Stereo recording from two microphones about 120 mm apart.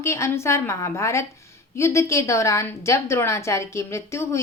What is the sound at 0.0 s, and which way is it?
Speech, 25° left (ahead or behind).